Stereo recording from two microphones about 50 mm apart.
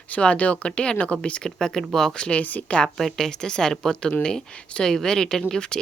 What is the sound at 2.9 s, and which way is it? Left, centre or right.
Speech, centre.